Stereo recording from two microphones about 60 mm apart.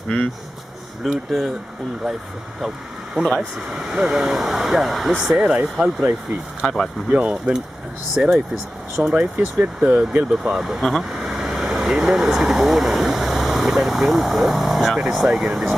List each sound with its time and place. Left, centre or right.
1.0 s speech: centre
3.3 s speech: centre
6.6 s speech: centre
7.2 s speech: centre
10.3 s speech: centre